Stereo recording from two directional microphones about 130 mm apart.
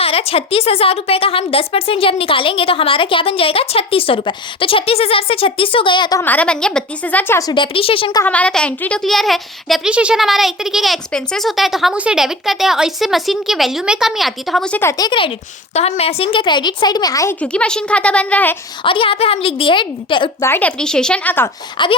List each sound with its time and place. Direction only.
0.0 s a woman's voice: 50° left (ahead or behind)
6.1 s a woman's voice: 15° left (ahead or behind)
7.5 s a woman's voice: 40° left (ahead or behind)
8.2 s speech: 10° left (ahead or behind)
14.8 s speech: 25° left (ahead or behind)
15.7 s a woman's voice: 55° left (ahead or behind); by 17.3 s 25° left (ahead or behind)
17.4 s a woman's voice: 10° left (ahead or behind)
18.8 s a woman's voice: 40° left (ahead or behind)
20.4 s a woman's voice: 15° left (ahead or behind)
21.8 s a woman's voice: 35° left (ahead or behind)